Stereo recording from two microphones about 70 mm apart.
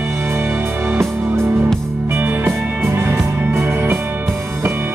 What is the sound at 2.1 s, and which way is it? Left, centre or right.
Music, right.